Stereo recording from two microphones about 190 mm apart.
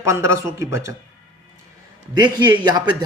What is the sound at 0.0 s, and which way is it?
Speech, 15° right (ahead or behind).